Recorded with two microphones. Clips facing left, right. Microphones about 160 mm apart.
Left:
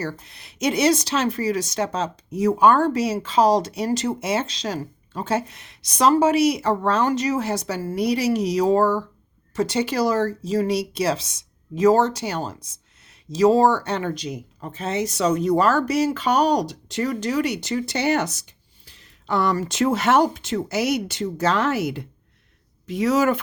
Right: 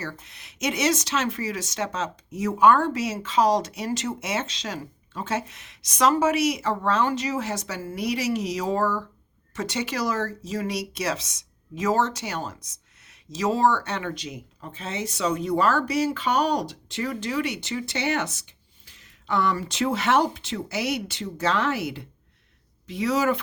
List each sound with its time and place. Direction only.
0.0 s speech: 35° left (ahead or behind)